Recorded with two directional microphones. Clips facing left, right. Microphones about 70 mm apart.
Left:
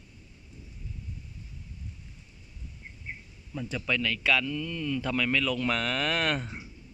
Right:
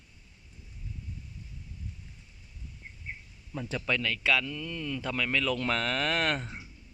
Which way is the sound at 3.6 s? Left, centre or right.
Right.